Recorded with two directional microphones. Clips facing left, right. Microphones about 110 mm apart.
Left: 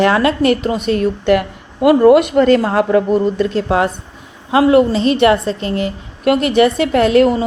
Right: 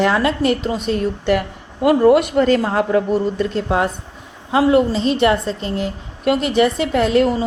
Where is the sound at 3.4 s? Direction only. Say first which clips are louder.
Left 3 dB; 75° left (ahead or behind).